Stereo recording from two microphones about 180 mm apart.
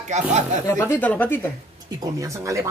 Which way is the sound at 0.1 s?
40° right (ahead or behind).